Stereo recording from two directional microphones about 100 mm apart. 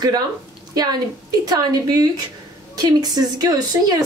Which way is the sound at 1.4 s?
40° right (ahead or behind).